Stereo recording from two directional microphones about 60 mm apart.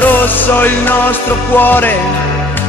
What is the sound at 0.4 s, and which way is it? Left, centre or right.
Music, left.